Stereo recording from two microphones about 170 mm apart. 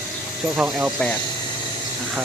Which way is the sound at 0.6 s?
10° right (ahead or behind).